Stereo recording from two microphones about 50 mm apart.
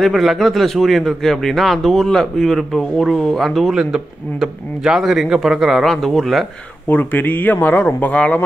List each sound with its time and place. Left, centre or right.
0.0 s a man's voice: centre
3.7 s a man's voice: centre
6.9 s speech: left
8.0 s speech: left